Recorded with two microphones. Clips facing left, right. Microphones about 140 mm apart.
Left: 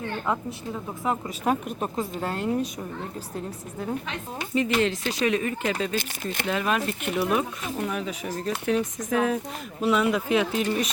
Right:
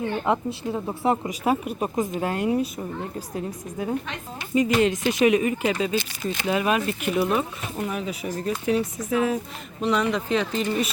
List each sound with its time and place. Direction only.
0.3 s a woman's voice: 25° right (ahead or behind); by 10.8 s 5° left (ahead or behind)